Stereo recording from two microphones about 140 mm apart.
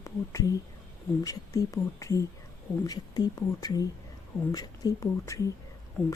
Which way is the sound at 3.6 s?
25° left (ahead or behind).